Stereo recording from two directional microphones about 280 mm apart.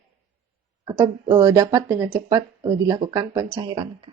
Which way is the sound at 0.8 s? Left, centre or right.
Centre.